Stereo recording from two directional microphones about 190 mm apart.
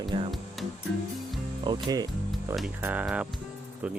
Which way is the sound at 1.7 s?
20° right (ahead or behind).